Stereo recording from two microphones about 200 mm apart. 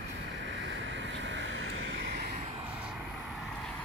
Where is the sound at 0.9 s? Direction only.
65° right (ahead or behind).